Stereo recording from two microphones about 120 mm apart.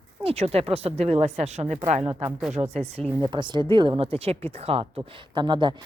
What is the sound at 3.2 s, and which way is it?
A woman's voice, 40° right (ahead or behind).